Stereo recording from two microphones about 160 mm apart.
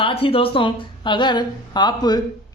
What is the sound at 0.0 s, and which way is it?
A woman's voice, 35° left (ahead or behind).